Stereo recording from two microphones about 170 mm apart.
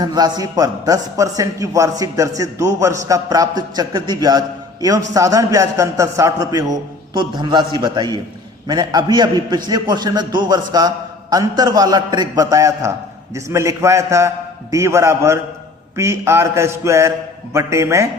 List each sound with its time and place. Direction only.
0.0 s a man's voice: 25° right (ahead or behind)